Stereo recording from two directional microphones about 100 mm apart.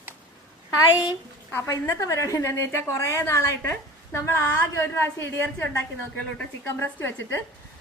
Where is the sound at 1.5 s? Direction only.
30° left (ahead or behind).